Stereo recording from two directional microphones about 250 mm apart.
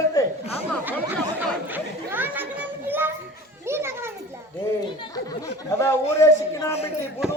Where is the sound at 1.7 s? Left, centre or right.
Centre.